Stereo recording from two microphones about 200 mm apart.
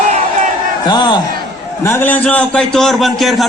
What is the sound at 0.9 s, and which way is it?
Speech, 20° left (ahead or behind).